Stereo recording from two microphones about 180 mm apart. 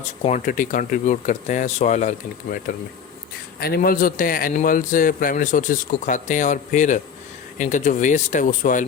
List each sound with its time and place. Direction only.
0.2 s a man's voice: 40° left (ahead or behind)
3.6 s a man's voice: 55° left (ahead or behind)